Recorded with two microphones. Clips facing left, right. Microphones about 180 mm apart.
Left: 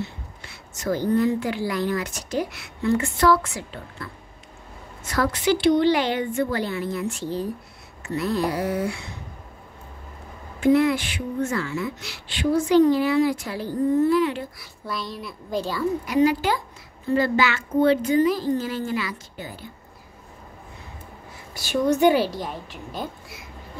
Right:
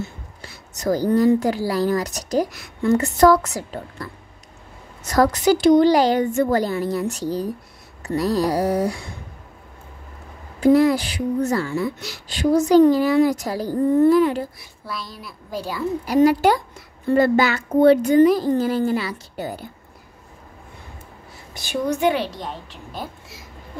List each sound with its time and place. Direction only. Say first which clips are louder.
0.0 s a woman's voice: right 1 dB; 40° right (ahead or behind)
10.6 s a woman's voice: right 3 dB; 35° right (ahead or behind)
14.9 s a child's voice: left 2 dB; centre (ahead or behind)
16.1 s a woman's voice: right 4 dB; 35° right (ahead or behind)
17.1 s a woman's voice: right 4 dB; 45° right (ahead or behind)
21.5 s a woman's voice: left 2 dB; 15° right (ahead or behind)
22.0 s a child's voice: left 2 dB; 5° left (ahead or behind)